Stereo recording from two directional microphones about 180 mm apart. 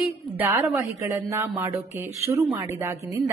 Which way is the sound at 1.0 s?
15° right (ahead or behind).